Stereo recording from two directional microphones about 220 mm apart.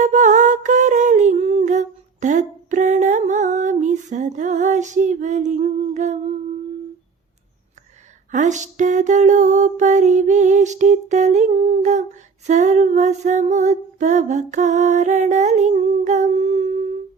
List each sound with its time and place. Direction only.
0.0 s music: 35° right (ahead or behind)
8.3 s female singing: 35° right (ahead or behind)